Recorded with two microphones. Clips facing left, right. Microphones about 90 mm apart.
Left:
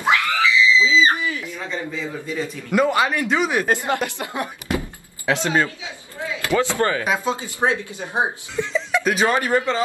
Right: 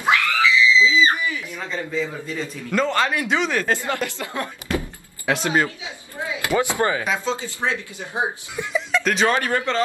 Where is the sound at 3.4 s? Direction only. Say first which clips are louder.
Left 2 dB; 15° left (ahead or behind).